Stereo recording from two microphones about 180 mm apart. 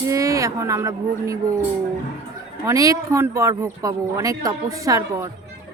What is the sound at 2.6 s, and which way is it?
Speech, 20° right (ahead or behind).